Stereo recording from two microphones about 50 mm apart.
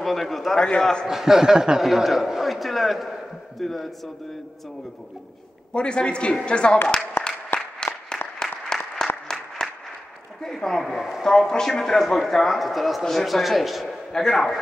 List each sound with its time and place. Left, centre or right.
0.0 s speech: centre
0.6 s a man's voice: centre
1.0 s speech: centre
5.7 s a woman's voice: centre
7.2 s applause: left
7.8 s applause: centre
10.4 s a sound: centre
10.9 s speech: centre
11.2 s speech: centre